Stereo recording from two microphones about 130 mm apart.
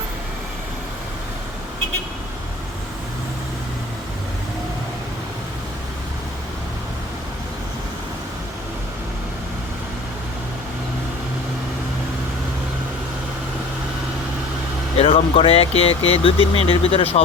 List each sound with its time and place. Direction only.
14.9 s speech: 45° left (ahead or behind)